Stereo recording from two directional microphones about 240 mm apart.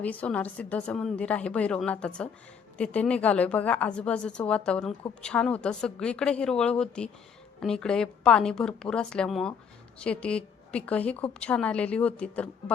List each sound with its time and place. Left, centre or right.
0.0 s a woman's voice: centre